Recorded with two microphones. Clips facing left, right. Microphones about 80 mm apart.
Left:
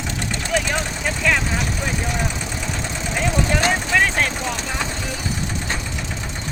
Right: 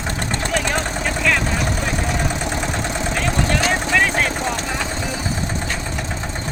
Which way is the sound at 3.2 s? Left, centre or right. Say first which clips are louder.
Left 2 dB; centre.